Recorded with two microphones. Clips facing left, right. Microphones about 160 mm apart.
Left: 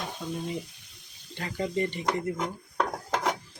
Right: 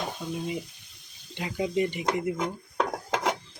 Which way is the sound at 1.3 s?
15° right (ahead or behind).